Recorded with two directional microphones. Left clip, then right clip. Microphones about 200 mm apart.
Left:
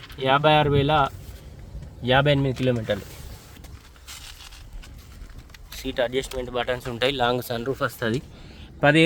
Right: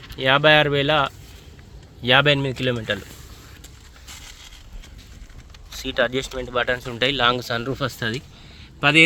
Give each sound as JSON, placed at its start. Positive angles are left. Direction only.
{"t": 0.2, "sound": "speech", "side_deg": -5}
{"t": 5.7, "sound": "speech", "side_deg": 10}
{"t": 7.0, "sound": "speech", "side_deg": 40}
{"t": 8.8, "sound": "speech", "side_deg": 5}